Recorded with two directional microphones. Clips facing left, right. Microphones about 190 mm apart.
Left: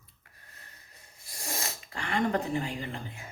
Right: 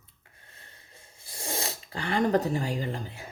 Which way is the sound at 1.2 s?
30° right (ahead or behind).